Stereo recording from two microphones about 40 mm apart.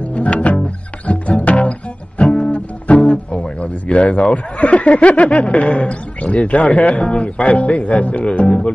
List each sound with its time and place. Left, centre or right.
0.1 s music: left
4.1 s speech: left